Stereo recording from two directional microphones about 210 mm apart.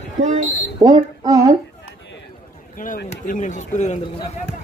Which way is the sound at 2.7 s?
40° left (ahead or behind).